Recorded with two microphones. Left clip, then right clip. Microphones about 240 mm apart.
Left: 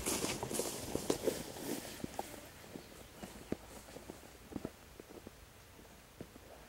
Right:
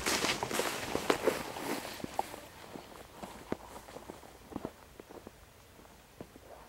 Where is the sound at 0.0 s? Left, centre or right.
Centre.